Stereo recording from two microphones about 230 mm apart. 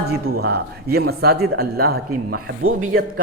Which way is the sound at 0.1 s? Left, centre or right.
Right.